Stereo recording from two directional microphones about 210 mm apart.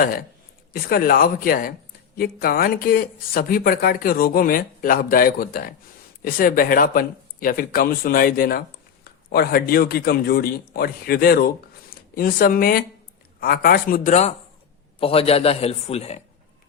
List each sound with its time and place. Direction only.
0.0 s a man's voice: 45° left (ahead or behind)